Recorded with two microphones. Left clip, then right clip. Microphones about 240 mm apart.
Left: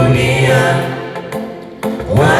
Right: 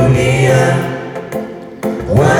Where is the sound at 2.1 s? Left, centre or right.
Right.